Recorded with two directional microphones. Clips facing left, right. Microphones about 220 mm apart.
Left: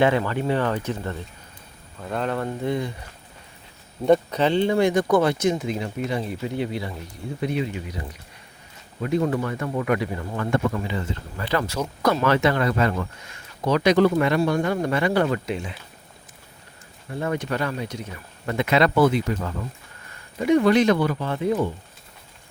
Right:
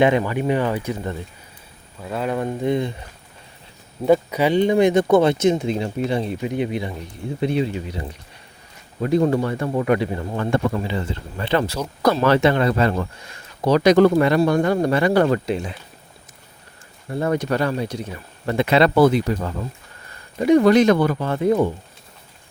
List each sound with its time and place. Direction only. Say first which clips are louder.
0.0 s speech: right 3 dB; 15° right (ahead or behind)
4.0 s speech: right 2 dB; 5° right (ahead or behind)
7.4 s speech: right 5 dB; 30° right (ahead or behind)
17.2 s speech: right 5 dB; 40° right (ahead or behind)